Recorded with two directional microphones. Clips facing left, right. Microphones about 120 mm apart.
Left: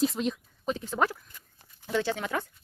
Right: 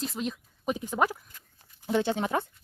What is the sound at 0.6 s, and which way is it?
Speech, 10° right (ahead or behind).